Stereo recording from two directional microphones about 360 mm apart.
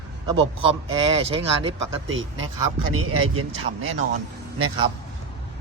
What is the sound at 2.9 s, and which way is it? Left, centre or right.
Speech, right.